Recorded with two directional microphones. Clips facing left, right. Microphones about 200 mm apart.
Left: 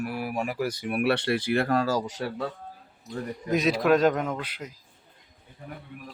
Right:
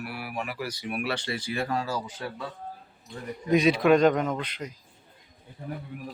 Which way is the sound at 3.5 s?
Centre (ahead or behind).